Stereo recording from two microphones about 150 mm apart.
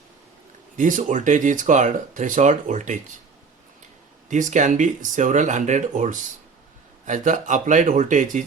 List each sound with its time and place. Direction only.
0.8 s speech: 60° right (ahead or behind)
4.3 s speech: 55° right (ahead or behind)